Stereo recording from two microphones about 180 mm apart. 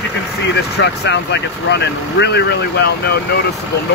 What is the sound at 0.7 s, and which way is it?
Speech, 70° left (ahead or behind).